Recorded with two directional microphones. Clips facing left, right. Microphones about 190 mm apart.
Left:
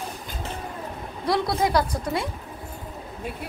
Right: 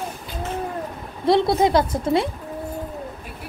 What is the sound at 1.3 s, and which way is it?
A woman's voice, 25° right (ahead or behind).